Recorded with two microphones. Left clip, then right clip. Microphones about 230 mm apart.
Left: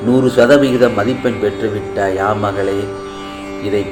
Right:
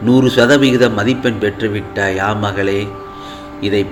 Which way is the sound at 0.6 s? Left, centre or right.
Right.